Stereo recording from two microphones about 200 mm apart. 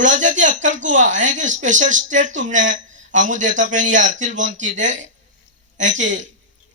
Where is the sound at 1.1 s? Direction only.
40° right (ahead or behind).